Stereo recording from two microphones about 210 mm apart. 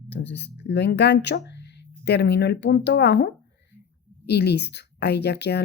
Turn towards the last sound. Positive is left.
turn(degrees=50)  # may be behind; listen again after turning